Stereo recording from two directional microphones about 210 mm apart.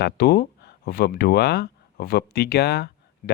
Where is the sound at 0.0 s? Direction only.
50° left (ahead or behind).